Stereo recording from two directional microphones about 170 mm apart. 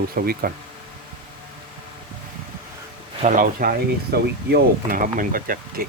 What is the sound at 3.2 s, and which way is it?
Speech, 50° right (ahead or behind).